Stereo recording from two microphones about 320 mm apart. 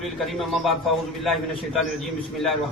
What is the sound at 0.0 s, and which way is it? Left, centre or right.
A man's voice, centre.